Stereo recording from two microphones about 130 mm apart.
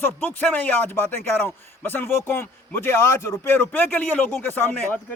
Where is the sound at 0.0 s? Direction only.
15° left (ahead or behind).